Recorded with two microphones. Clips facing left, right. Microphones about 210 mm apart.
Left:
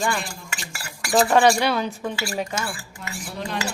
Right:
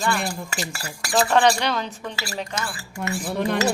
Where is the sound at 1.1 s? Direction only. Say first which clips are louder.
Left 2 dB; 15° left (ahead or behind).